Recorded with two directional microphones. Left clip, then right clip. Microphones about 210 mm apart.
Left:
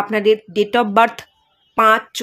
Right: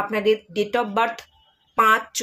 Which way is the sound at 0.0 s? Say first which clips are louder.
Left 5 dB; 35° left (ahead or behind).